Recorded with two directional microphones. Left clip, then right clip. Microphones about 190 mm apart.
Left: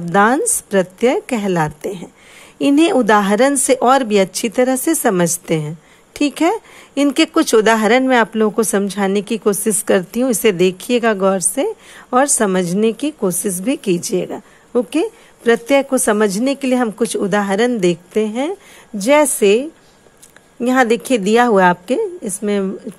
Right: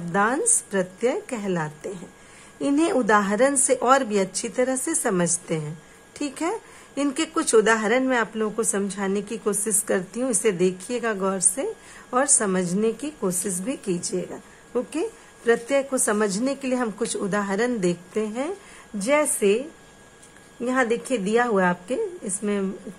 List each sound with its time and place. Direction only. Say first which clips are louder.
0.0 s speech: left 9 dB; 35° left (ahead or behind)
20.6 s speech: left 9 dB; 40° left (ahead or behind)